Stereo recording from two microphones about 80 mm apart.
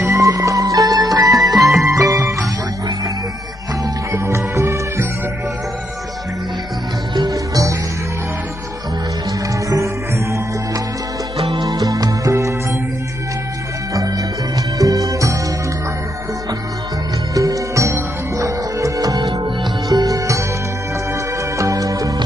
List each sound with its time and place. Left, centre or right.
0.2 s music: right
1.6 s music: centre
1.9 s music: right
4.1 s music: right
7.2 s music: right
9.7 s music: right
13.9 s music: right
17.3 s music: right
21.5 s music: right